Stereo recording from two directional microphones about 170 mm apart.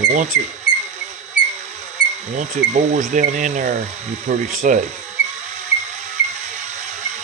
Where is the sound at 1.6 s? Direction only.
40° right (ahead or behind).